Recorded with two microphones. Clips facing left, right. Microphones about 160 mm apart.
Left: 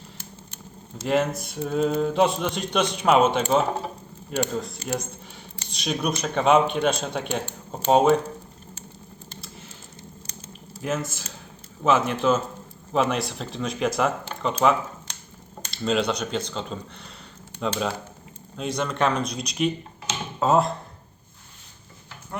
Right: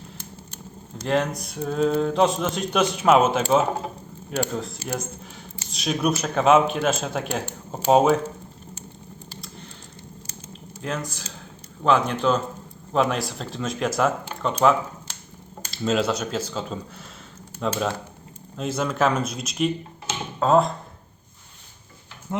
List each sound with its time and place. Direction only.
0.9 s speech: 5° left (ahead or behind)
10.8 s speech: 5° left (ahead or behind)
22.3 s speech: 20° right (ahead or behind)